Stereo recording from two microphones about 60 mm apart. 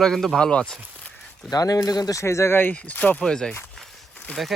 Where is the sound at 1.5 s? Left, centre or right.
Left.